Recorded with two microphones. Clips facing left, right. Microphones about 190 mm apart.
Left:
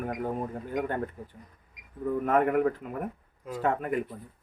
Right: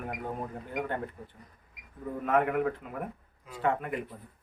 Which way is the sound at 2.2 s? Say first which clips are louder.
Left 2 dB; 45° left (ahead or behind).